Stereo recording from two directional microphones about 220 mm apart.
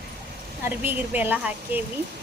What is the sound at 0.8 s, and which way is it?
Speech, 10° right (ahead or behind).